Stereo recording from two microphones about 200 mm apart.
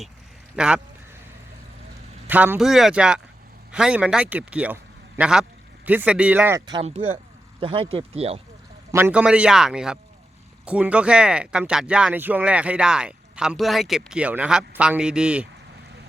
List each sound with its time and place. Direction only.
0.5 s speech: 5° right (ahead or behind)
2.2 s speech: 10° right (ahead or behind)
7.6 s speech: 25° right (ahead or behind)
8.9 s speech: 10° right (ahead or behind)